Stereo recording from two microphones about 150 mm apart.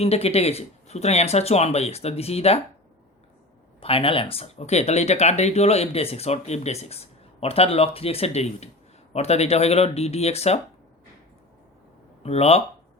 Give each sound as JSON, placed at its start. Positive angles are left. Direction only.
{"t": 0.0, "sound": "speech", "side_deg": 40}
{"t": 3.8, "sound": "speech", "side_deg": 40}
{"t": 12.2, "sound": "speech", "side_deg": 45}